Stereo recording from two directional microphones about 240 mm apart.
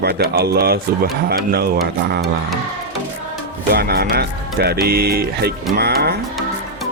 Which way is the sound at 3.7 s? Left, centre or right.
Right.